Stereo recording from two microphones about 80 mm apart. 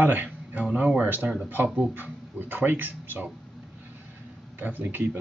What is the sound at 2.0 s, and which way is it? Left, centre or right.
Speech, right.